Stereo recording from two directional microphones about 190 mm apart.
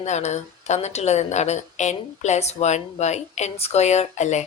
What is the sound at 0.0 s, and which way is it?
A woman's voice, 35° left (ahead or behind).